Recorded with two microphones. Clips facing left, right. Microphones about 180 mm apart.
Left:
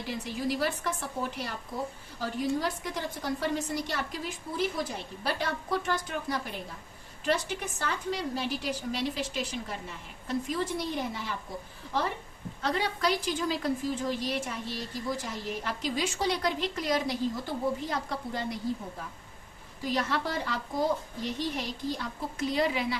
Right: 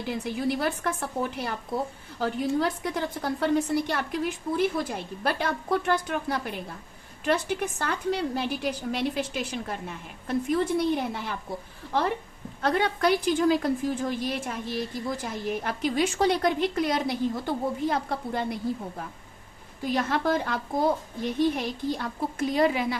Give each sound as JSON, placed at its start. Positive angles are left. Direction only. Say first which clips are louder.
{"t": 0.3, "sound": "a woman's voice", "louder": "right 2 dB", "side_deg": -55}
{"t": 12.6, "sound": "a woman's voice", "louder": "right 5 dB", "side_deg": -55}
{"t": 19.8, "sound": "a woman's voice", "louder": "right 4 dB", "side_deg": -50}